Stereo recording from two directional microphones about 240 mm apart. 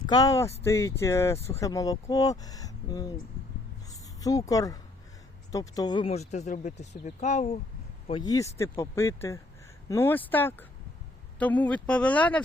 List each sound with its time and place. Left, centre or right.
0.1 s speech: centre
3.8 s a sound: centre
5.5 s speech: centre